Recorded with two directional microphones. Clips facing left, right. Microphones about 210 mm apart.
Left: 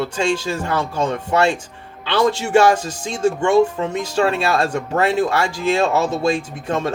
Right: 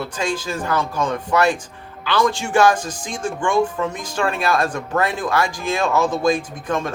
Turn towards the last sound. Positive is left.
turn(degrees=25)  # may be behind; listen again after turning